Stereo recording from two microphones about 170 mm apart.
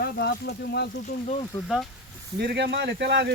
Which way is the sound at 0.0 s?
75° left (ahead or behind).